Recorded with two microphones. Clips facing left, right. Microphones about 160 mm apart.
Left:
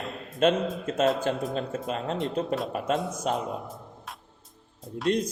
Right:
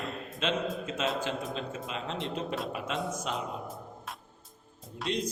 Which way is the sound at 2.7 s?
45° left (ahead or behind).